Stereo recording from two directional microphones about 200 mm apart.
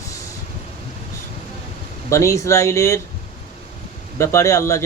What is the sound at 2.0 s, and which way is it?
Speech, 15° left (ahead or behind).